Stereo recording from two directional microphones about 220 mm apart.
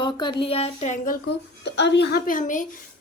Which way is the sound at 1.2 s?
50° left (ahead or behind).